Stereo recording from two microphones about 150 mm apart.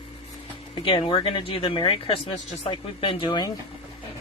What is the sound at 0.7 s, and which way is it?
A woman's voice, 35° left (ahead or behind).